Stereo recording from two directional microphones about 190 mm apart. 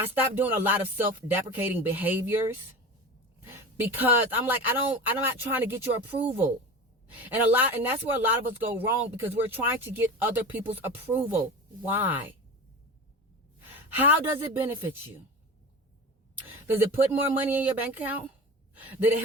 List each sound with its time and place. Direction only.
0.0 s speech: 10° right (ahead or behind)
3.4 s speech: 10° right (ahead or behind)
7.1 s speech: 10° right (ahead or behind)
13.9 s speech: 10° right (ahead or behind)
16.7 s a woman's voice: 10° right (ahead or behind)